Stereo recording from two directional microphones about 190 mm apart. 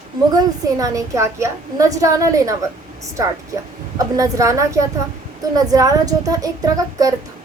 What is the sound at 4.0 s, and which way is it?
A child's voice, 15° right (ahead or behind).